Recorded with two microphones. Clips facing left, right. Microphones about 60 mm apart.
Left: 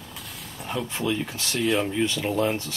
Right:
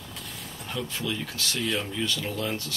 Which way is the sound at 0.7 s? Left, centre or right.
Left.